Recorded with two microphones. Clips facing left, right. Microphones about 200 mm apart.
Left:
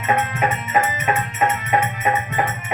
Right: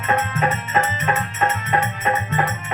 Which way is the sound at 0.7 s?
10° left (ahead or behind).